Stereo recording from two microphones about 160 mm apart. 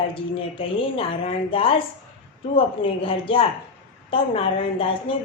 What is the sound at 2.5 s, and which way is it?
A woman's voice, 35° left (ahead or behind).